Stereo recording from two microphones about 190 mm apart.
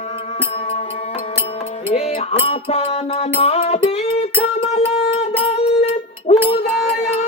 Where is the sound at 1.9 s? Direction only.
35° left (ahead or behind).